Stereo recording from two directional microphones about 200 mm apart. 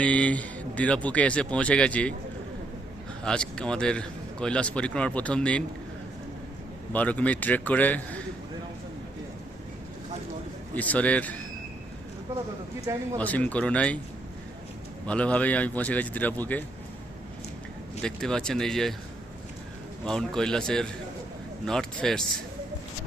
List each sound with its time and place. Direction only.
0.0 s a man's voice: 5° left (ahead or behind)
3.2 s a man's voice: 5° left (ahead or behind)
6.9 s a man's voice: 5° left (ahead or behind)
10.8 s a man's voice: 5° left (ahead or behind)
13.1 s a man's voice: 5° left (ahead or behind)
15.0 s a man's voice: 5° left (ahead or behind)
18.0 s a man's voice: 5° left (ahead or behind)
20.1 s a man's voice: 5° left (ahead or behind)